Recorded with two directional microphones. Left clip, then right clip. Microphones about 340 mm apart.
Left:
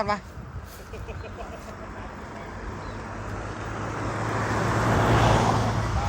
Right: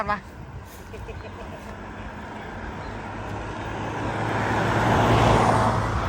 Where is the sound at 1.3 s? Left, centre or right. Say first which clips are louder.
Right 1 dB; right.